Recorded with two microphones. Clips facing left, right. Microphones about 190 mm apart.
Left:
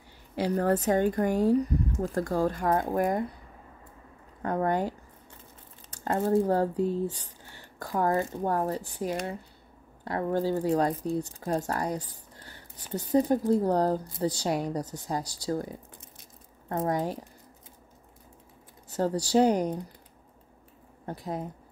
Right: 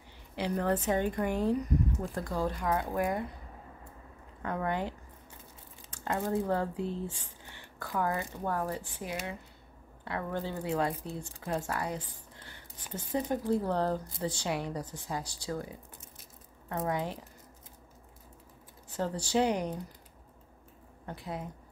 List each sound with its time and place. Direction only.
0.4 s speech: 40° left (ahead or behind)
4.4 s speech: 40° left (ahead or behind)
18.9 s speech: 40° left (ahead or behind)
21.0 s speech: 40° left (ahead or behind)